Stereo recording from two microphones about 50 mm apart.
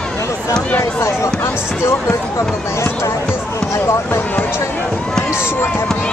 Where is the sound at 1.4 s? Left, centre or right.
Left.